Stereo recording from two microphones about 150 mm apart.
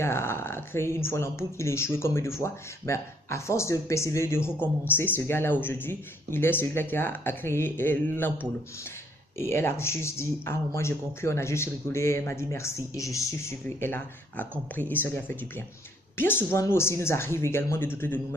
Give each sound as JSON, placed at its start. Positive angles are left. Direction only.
{"t": 0.0, "sound": "speech", "side_deg": 15}